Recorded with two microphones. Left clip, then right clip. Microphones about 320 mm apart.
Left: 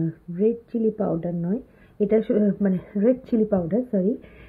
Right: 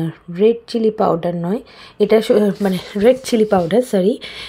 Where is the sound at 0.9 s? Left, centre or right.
Centre.